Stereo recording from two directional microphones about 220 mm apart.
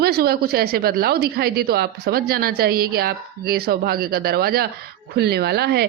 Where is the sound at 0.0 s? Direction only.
45° right (ahead or behind).